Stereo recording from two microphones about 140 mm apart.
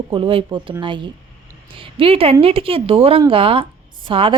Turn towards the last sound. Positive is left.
turn(degrees=-40)  # may be behind; listen again after turning